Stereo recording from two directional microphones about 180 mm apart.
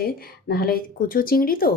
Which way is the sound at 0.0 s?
60° left (ahead or behind).